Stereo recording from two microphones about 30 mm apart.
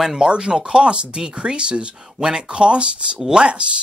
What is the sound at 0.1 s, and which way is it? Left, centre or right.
Speech, right.